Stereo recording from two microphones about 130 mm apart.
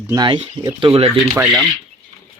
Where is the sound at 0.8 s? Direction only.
45° right (ahead or behind).